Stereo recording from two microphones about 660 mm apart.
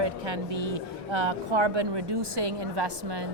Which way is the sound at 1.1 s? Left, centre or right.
Right.